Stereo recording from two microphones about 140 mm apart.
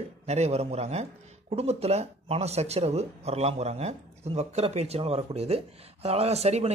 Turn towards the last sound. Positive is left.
turn(degrees=-50)  # may be behind; listen again after turning